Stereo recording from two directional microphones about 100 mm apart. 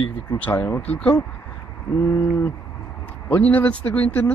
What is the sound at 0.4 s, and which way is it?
Speech, 20° left (ahead or behind).